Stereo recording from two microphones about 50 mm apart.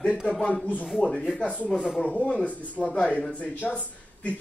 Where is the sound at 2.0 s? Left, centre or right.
Left.